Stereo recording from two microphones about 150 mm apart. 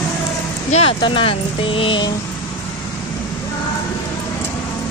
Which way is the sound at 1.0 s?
35° left (ahead or behind).